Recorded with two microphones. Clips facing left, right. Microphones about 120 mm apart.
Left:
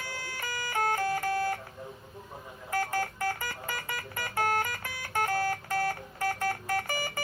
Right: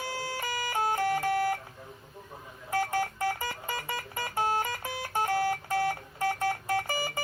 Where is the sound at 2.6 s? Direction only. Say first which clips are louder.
Right 2 dB; 25° right (ahead or behind).